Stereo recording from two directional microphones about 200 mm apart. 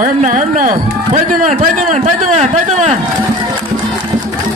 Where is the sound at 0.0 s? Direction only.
40° right (ahead or behind).